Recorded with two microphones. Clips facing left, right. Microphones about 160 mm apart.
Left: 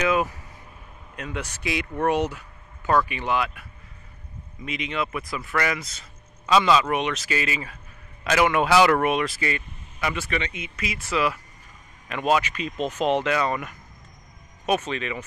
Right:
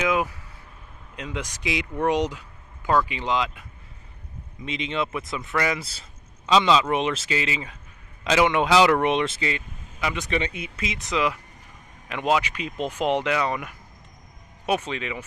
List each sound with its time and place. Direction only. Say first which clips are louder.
1.1 s speech: even; 15° right (ahead or behind)
4.6 s speech: right 1 dB; 25° right (ahead or behind)
10.3 s speech: right 2 dB; 35° right (ahead or behind)
10.9 s speech: even; 20° right (ahead or behind)